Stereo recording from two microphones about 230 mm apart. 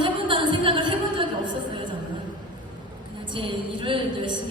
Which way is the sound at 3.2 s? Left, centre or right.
Right.